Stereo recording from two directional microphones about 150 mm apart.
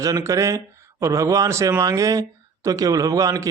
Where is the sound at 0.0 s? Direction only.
20° right (ahead or behind).